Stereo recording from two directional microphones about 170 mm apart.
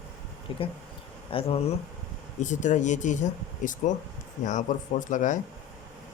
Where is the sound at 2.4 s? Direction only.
45° left (ahead or behind).